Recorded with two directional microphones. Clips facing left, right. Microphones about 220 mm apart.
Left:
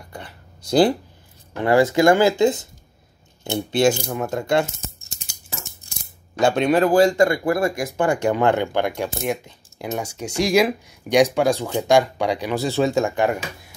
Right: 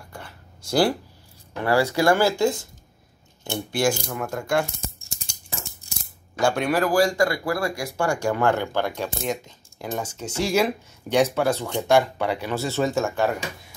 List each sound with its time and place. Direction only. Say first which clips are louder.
0.1 s a sound: left 4 dB; 20° left (ahead or behind)
1.6 s speech: left 5 dB; 20° left (ahead or behind)
5.1 s mechanisms: right 1 dB; 5° left (ahead or behind)
6.4 s speech: left 4 dB; 20° left (ahead or behind)